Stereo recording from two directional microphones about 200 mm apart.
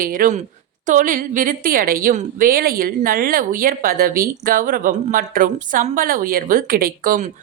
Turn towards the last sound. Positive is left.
turn(degrees=-45)  # may be behind; listen again after turning